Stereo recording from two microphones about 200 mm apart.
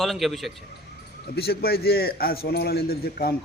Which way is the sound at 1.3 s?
50° left (ahead or behind).